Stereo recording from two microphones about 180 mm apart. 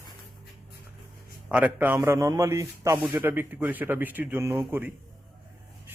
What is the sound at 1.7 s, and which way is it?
Speech, 10° right (ahead or behind).